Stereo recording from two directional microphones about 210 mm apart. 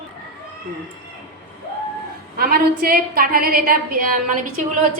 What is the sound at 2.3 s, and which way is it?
A woman's voice, 45° right (ahead or behind).